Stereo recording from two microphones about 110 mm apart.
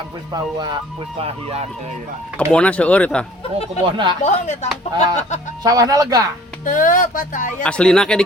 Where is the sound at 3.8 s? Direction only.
45° right (ahead or behind).